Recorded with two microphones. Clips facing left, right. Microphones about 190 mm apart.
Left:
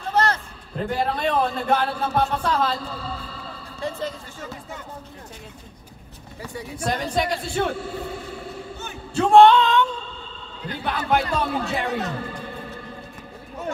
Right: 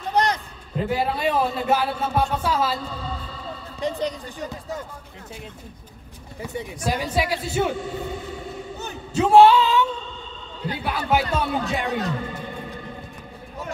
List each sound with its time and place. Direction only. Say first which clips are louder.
0.1 s a sound: even; 15° right (ahead or behind)
0.7 s a man's voice: right 1 dB; 5° right (ahead or behind)
3.8 s a man's voice: right 3 dB; 15° right (ahead or behind)
6.8 s a man's voice: even; 5° right (ahead or behind)
9.2 s a sound: even; 5° right (ahead or behind)
10.8 s a man's voice: even; 5° right (ahead or behind)